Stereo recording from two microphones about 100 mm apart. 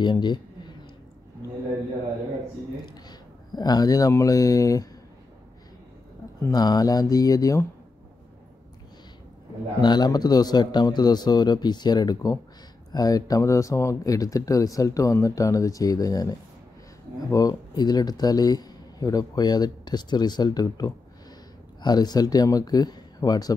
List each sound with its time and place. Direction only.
0.0 s a man's voice: 50° left (ahead or behind)
2.9 s a sound: 45° left (ahead or behind)
4.1 s a man's voice: 35° left (ahead or behind)
6.5 s a man's voice: 40° left (ahead or behind)
9.8 s a man's voice: 45° left (ahead or behind)